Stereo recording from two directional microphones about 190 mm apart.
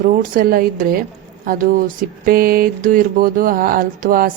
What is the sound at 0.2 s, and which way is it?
Speech, 45° right (ahead or behind).